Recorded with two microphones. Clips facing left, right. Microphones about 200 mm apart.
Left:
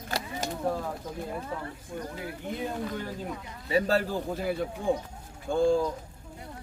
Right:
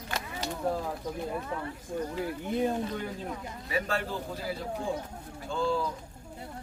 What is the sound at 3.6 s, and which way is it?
Speech, 30° left (ahead or behind).